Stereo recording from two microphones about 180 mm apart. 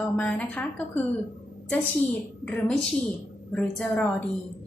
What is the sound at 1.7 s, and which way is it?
A woman's voice, 10° left (ahead or behind).